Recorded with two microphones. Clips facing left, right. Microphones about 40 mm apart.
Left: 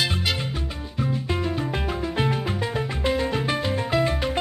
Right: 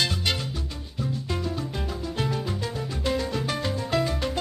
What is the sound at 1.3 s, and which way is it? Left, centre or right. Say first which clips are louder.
Music: left 4 dB; left.